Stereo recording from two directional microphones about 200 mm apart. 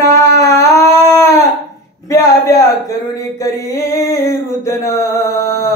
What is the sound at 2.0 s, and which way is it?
Speech, 15° left (ahead or behind).